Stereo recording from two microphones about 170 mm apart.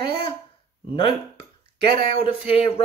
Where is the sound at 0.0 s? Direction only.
30° left (ahead or behind).